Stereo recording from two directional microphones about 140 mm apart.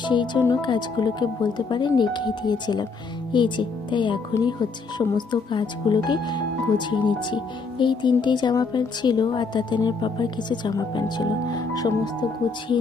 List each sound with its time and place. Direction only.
0.0 s speech: 35° left (ahead or behind)